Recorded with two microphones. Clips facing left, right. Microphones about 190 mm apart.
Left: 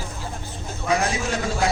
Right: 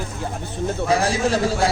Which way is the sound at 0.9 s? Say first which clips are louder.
Right 3 dB; 30° right (ahead or behind).